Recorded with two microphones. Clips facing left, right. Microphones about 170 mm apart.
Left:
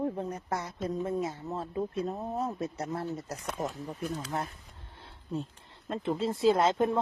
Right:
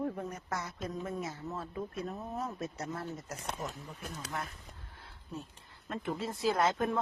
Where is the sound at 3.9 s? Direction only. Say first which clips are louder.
Left 10 dB; 50° left (ahead or behind).